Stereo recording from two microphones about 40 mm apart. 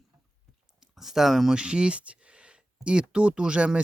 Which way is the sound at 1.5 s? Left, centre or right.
Right.